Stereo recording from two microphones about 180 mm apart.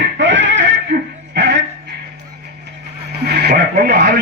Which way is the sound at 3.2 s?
65° right (ahead or behind).